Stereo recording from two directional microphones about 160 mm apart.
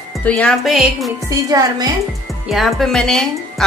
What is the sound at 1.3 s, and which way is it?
Speech, 20° right (ahead or behind).